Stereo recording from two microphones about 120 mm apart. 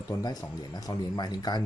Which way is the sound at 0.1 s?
35° left (ahead or behind).